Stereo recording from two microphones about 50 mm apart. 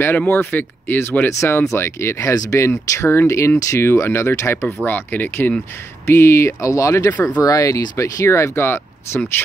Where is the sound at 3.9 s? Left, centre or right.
Left.